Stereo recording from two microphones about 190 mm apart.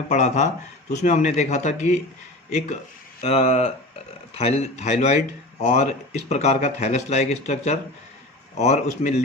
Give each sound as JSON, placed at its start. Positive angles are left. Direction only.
{"t": 0.1, "sound": "speech", "side_deg": 35}